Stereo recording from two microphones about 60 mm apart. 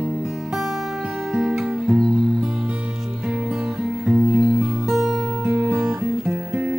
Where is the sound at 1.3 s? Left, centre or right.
Centre.